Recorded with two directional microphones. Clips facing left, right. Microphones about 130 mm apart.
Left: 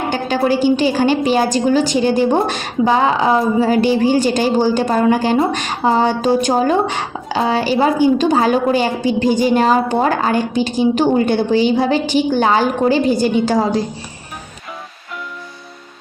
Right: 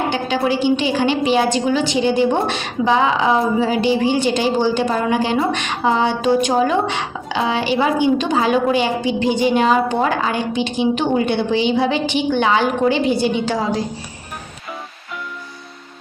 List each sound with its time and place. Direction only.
0.1 s a woman's voice: 45° left (ahead or behind)